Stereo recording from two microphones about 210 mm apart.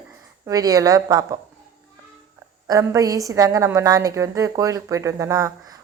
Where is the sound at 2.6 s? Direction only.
15° right (ahead or behind).